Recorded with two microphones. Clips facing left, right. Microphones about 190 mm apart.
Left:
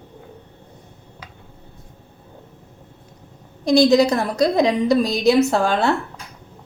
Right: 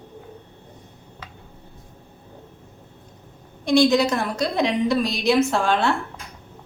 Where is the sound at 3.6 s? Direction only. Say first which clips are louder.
Left 3 dB; 40° left (ahead or behind).